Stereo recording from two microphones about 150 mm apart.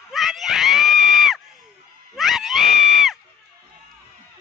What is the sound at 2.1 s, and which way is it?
Screaming, centre (ahead or behind).